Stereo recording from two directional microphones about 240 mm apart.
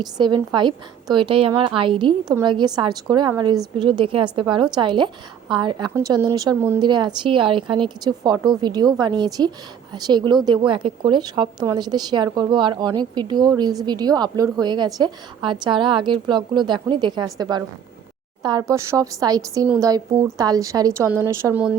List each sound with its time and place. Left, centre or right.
0.0 s a woman's voice: centre